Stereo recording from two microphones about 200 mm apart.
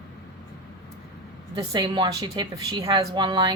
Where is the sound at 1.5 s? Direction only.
20° right (ahead or behind).